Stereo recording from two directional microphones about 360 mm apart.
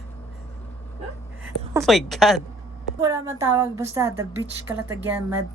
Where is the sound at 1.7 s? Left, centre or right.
Centre.